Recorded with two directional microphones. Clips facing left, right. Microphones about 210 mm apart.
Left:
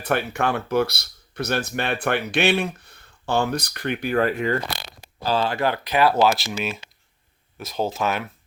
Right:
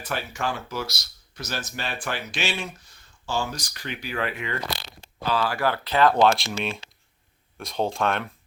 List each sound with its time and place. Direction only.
0.0 s speech: 60° left (ahead or behind); by 4.5 s 40° left (ahead or behind)
5.2 s speech: 30° left (ahead or behind); by 8.3 s 5° left (ahead or behind)